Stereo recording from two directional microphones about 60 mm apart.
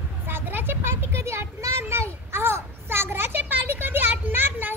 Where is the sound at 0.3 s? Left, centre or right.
Right.